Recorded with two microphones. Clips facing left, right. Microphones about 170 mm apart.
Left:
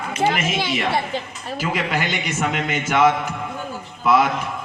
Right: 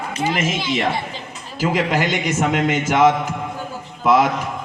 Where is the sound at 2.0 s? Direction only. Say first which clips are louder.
Right 5 dB; 45° right (ahead or behind).